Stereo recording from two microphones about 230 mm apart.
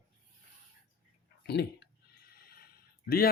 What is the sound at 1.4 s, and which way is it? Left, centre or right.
Speech, left.